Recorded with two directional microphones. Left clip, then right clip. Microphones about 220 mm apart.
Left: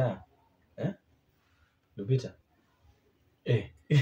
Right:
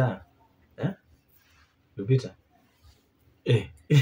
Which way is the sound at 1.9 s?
15° right (ahead or behind).